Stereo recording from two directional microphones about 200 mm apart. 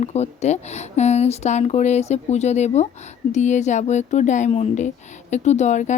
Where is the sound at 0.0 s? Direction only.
35° left (ahead or behind).